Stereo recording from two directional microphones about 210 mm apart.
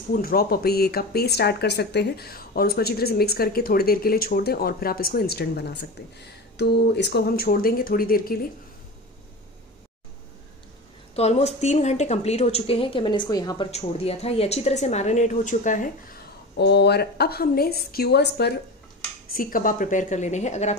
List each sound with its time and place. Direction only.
0.1 s speech: 45° left (ahead or behind)
11.1 s speech: 30° left (ahead or behind)
13.7 s a woman's voice: 30° left (ahead or behind)
16.5 s a woman's voice: 55° left (ahead or behind); by 20.7 s 35° left (ahead or behind)